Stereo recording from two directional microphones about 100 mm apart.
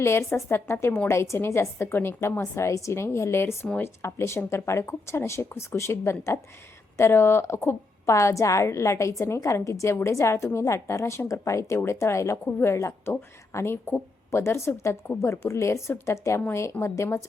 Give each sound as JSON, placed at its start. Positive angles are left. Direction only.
{"t": 0.0, "sound": "a woman's voice", "side_deg": 25}